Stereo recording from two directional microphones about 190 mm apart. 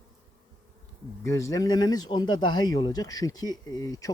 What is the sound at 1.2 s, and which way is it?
Speech, 15° left (ahead or behind).